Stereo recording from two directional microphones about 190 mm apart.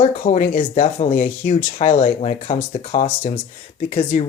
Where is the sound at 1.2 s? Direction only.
30° left (ahead or behind).